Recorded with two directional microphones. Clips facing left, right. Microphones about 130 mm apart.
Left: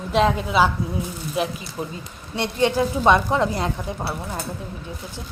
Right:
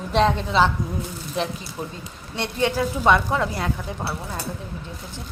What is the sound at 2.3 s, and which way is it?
Speech, 15° left (ahead or behind).